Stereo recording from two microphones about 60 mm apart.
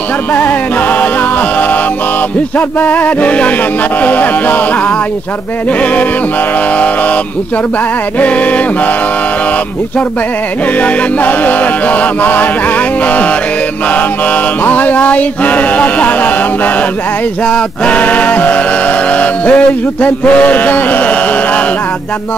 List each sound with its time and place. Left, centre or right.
0.3 s a capella: left
2.8 s a capella: left
8.2 s a capella: left
10.8 s a capella: left
14.6 s a capella: left